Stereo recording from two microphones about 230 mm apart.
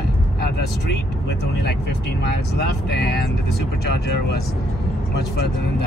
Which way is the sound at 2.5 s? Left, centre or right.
Left.